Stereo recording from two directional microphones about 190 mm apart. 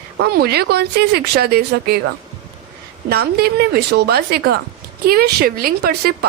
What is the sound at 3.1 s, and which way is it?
Speech, 55° right (ahead or behind).